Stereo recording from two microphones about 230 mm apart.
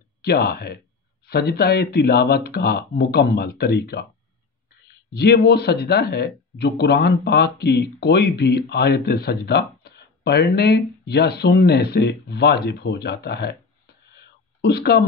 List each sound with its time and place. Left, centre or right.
0.2 s speech: left
5.1 s speech: left
14.6 s speech: left